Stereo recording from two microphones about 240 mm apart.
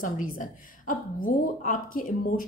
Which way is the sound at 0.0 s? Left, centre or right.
Left.